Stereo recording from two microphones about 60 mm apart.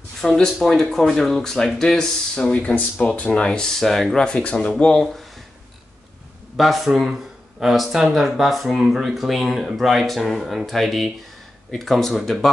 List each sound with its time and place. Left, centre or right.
0.4 s speech: centre
4.2 s speech: centre
6.5 s speech: centre